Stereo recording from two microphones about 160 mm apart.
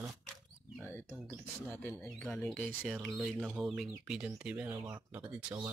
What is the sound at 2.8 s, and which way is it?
Speech, centre (ahead or behind).